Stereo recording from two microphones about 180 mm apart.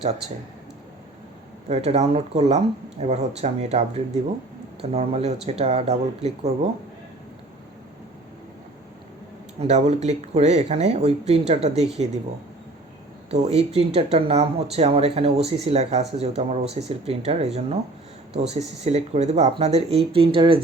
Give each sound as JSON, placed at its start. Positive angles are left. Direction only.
{"t": 1.6, "sound": "speech", "side_deg": -40}
{"t": 9.6, "sound": "speech", "side_deg": -40}
{"t": 13.3, "sound": "speech", "side_deg": -35}